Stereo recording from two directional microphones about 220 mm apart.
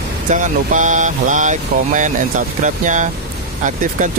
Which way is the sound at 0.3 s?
35° right (ahead or behind).